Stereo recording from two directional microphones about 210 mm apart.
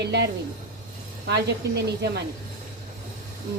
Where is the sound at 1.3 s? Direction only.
55° right (ahead or behind).